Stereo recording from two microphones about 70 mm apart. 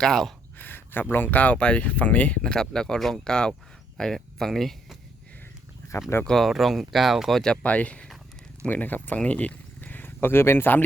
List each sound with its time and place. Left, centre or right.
0.0 s speech: centre
0.6 s a sound: left
1.1 s speech: left; by 4.9 s centre
6.2 s speech: centre
7.6 s speech: left